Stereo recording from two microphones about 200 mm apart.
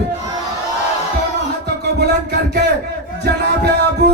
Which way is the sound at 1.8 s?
55° right (ahead or behind).